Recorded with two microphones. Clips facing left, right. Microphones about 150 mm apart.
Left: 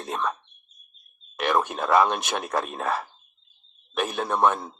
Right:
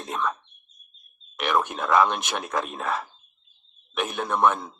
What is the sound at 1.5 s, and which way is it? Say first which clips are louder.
Speech: even; 25° left (ahead or behind).